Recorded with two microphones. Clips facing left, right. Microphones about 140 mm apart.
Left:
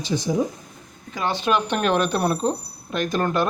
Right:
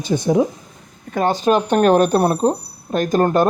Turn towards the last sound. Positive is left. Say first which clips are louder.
# right 7 dB
turn(degrees=-40)  # may be behind; listen again after turning